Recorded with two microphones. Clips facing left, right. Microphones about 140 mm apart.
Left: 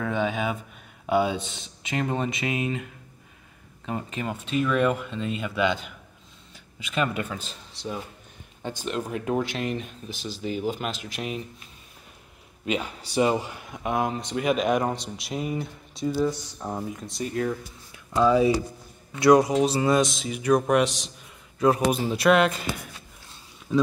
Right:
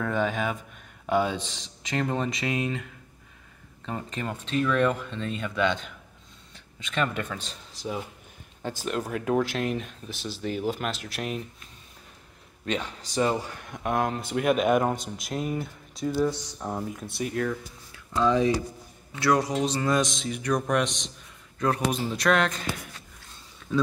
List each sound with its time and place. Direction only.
0.0 s speech: centre (ahead or behind)
12.6 s speech: 10° left (ahead or behind)
13.7 s speech: centre (ahead or behind)
17.5 s speech: 15° left (ahead or behind)